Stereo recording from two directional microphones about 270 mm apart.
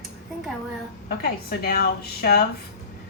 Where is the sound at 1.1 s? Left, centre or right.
Left.